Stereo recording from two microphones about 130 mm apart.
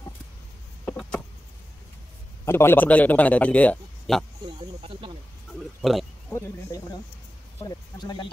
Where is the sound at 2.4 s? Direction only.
20° left (ahead or behind).